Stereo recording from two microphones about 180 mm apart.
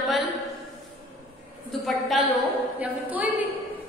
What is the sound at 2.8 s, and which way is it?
Speech, 10° right (ahead or behind).